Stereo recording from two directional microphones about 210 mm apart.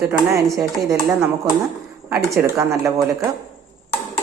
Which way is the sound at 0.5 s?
15° right (ahead or behind).